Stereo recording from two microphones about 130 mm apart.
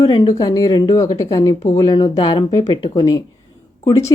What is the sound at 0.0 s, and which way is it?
A woman's voice, 45° left (ahead or behind).